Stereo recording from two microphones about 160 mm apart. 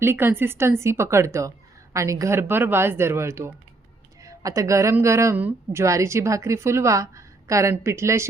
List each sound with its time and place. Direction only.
0.0 s a woman's voice: 15° right (ahead or behind)